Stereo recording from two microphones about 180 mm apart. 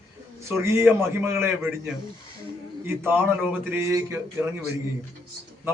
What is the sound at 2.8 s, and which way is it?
A man's voice, 10° right (ahead or behind).